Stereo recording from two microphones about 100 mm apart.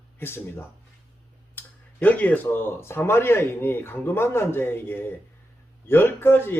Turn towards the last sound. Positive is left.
turn(degrees=20)  # may be behind; listen again after turning